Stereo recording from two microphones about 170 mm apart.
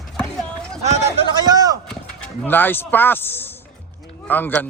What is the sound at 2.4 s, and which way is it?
Speech, 10° left (ahead or behind).